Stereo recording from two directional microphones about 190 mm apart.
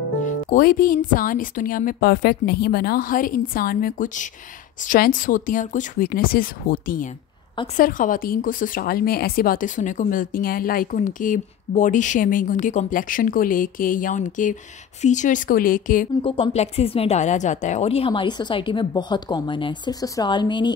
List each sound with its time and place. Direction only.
0.2 s speech: 45° left (ahead or behind)
16.2 s speech: 30° left (ahead or behind)